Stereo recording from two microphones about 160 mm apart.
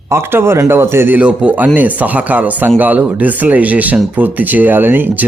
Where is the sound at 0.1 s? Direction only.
15° right (ahead or behind).